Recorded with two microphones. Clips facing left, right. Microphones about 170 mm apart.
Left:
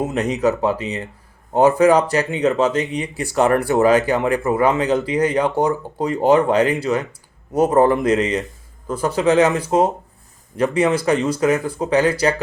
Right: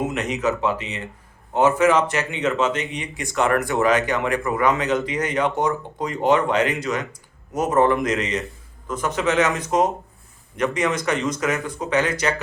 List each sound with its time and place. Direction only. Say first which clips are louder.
0.0 s speech: left 4 dB; 35° left (ahead or behind)